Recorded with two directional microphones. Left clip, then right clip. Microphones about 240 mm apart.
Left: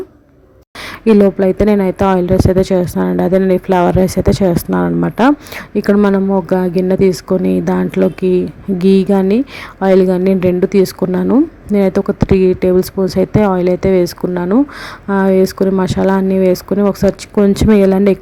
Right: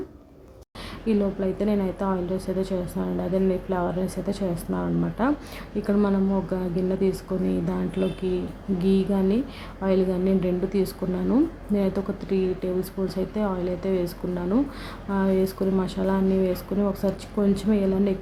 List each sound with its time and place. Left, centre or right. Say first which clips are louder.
1.0 s speech: left 15 dB; left